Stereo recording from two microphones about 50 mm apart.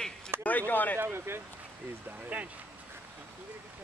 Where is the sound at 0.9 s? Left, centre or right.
Right.